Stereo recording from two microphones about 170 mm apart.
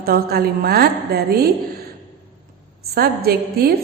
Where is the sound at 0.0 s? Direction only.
65° right (ahead or behind).